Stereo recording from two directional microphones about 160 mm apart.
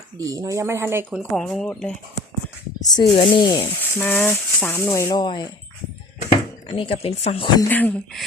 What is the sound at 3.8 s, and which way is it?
Speech, 10° left (ahead or behind).